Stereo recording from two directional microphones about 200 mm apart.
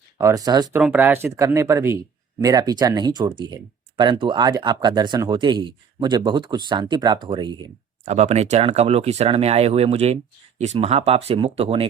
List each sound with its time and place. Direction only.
0.2 s speech: 15° right (ahead or behind)
0.8 s speech: 5° right (ahead or behind); by 7.5 s 25° right (ahead or behind)
8.0 s speech: 35° right (ahead or behind)